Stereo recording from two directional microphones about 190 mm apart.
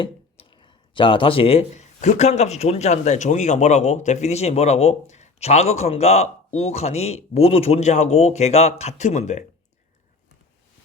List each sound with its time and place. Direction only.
0.0 s speech: 25° left (ahead or behind)